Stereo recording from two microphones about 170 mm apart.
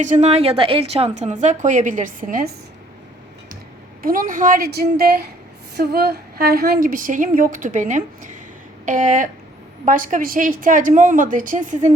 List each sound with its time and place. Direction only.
0.0 s a woman's voice: 45° right (ahead or behind)
4.0 s a woman's voice: 55° right (ahead or behind)